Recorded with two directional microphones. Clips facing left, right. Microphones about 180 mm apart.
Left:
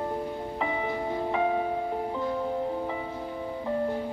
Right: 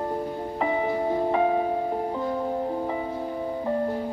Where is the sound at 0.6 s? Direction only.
45° right (ahead or behind).